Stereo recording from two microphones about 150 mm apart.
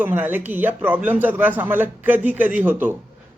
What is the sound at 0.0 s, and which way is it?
Speech, 10° right (ahead or behind).